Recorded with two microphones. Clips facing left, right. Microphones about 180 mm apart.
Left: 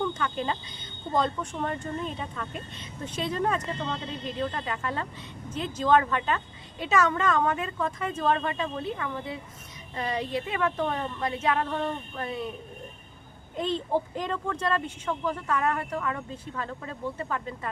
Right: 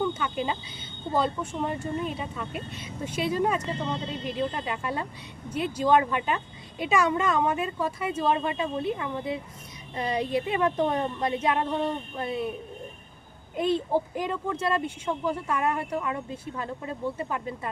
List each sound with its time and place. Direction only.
0.0 s speech: 10° right (ahead or behind)
13.6 s speech: 10° right (ahead or behind)